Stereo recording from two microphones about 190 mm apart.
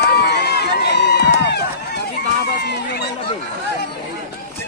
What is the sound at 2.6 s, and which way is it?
Crowd, 60° left (ahead or behind).